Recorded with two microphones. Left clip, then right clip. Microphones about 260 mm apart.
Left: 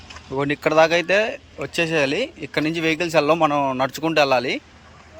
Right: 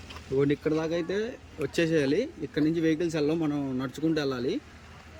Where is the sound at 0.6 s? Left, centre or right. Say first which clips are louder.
Left 12 dB; left.